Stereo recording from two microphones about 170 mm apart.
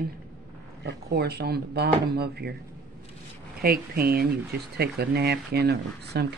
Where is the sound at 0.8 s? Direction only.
80° right.